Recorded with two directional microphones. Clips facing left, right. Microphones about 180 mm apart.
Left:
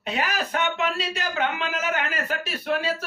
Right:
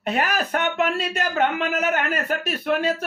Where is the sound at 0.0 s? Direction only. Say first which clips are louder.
Right 4 dB; 50° right (ahead or behind).